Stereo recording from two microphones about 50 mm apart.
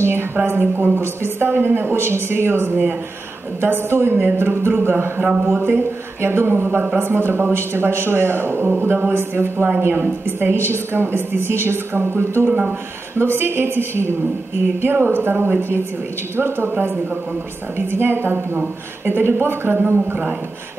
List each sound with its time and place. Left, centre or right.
0.0 s a woman's voice: right
8.6 s a woman's voice: right
12.4 s speech: right
13.2 s a woman's voice: right